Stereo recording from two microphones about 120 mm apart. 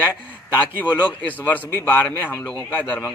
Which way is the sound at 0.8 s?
15° left (ahead or behind).